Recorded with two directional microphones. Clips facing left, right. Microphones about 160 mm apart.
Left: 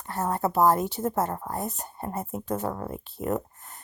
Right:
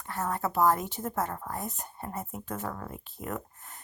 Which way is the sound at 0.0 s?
35° left (ahead or behind).